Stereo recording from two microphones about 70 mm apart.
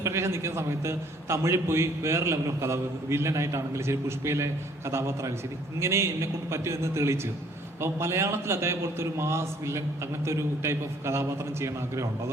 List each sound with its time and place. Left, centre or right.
0.0 s a man's voice: right